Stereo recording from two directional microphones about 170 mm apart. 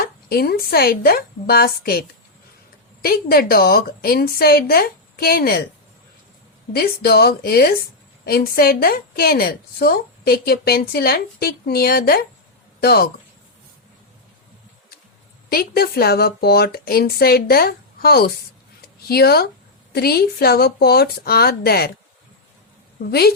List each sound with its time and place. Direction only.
0.0 s a woman's voice: 60° left (ahead or behind)
3.0 s a woman's voice: 60° left (ahead or behind)
6.7 s a woman's voice: 65° left (ahead or behind)
15.4 s a woman's voice: 65° left (ahead or behind)